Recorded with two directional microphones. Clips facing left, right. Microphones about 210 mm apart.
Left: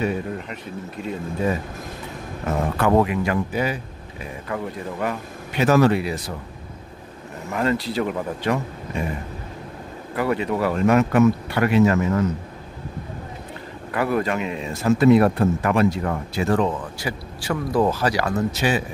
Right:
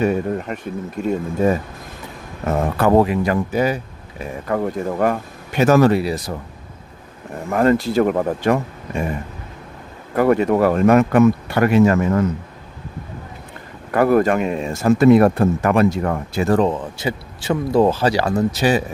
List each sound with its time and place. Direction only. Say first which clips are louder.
0.0 s speech: right 6 dB; 45° right (ahead or behind)
2.8 s speech: right 4 dB; 35° right (ahead or behind)
7.4 s speech: right 7 dB; 50° right (ahead or behind)
10.1 s speech: right 7 dB; 45° right (ahead or behind)
13.9 s speech: right 7 dB; 45° right (ahead or behind)